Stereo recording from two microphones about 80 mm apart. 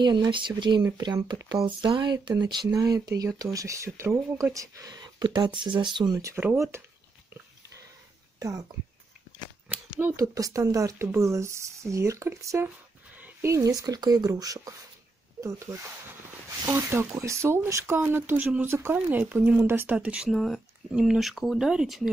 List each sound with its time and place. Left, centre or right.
0.0 s speech: right
1.7 s speech: right
3.5 s speech: right
4.9 s speech: right
6.3 s speech: right
8.4 s speech: right
9.7 s a sound: right
10.1 s speech: right
13.7 s speech: right
16.6 s speech: right
20.2 s speech: centre